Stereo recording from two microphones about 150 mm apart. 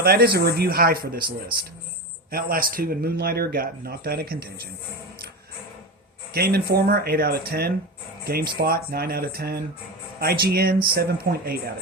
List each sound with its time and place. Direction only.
0.0 s speech: 90° right
2.3 s speech: 75° right (ahead or behind); by 4.7 s 90° right
6.3 s speech: 90° right